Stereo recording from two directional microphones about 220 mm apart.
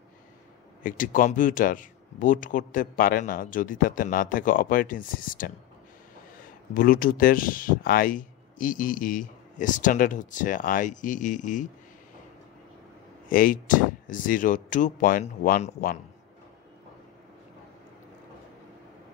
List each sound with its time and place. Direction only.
0.8 s speech: 40° left (ahead or behind)
6.7 s speech: 40° left (ahead or behind)
13.3 s speech: 40° left (ahead or behind)